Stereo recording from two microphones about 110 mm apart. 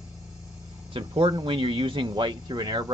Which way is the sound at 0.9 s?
50° right (ahead or behind).